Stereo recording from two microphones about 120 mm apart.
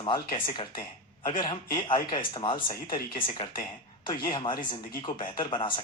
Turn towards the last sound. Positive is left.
turn(degrees=45)  # may be behind; listen again after turning